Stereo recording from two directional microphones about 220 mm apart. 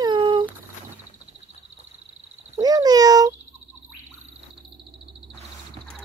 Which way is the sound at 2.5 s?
15° right (ahead or behind).